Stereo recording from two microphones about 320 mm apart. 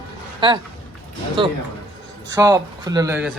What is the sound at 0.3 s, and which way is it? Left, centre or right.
A man's voice, centre.